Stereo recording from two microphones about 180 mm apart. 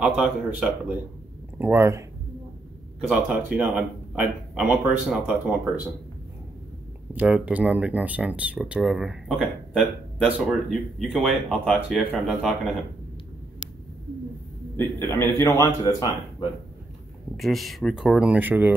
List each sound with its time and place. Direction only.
0.0 s speech: 5° right (ahead or behind)
3.0 s speech: 5° right (ahead or behind)
7.1 s speech: 10° right (ahead or behind)
14.8 s a man's voice: 15° left (ahead or behind)
17.4 s speech: centre (ahead or behind)